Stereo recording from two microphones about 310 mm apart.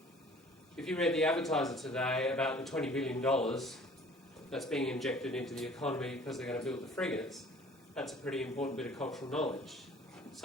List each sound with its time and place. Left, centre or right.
0.8 s speech: centre